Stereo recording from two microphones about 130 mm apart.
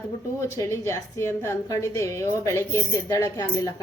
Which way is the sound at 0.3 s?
25° left (ahead or behind).